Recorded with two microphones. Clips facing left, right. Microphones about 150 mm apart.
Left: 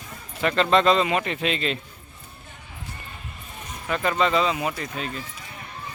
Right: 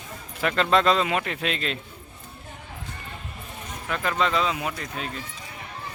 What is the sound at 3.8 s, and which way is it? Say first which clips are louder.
Speech: left 3 dB; centre (ahead or behind).